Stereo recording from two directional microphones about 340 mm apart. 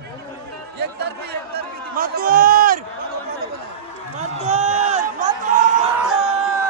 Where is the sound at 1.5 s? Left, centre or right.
Right.